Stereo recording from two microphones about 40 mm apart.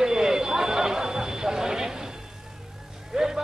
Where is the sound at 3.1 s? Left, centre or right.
Centre.